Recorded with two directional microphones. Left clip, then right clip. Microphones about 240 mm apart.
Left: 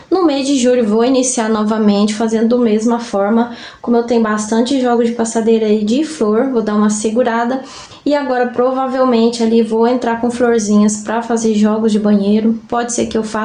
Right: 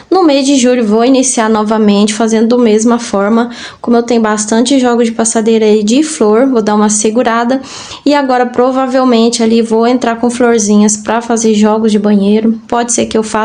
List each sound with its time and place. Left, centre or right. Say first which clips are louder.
0.1 s speech: right 6 dB; right